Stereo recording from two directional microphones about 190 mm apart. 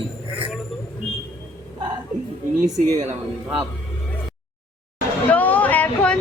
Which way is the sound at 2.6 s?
40° right (ahead or behind).